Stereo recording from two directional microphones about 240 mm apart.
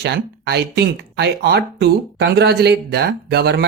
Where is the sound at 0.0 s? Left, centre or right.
Right.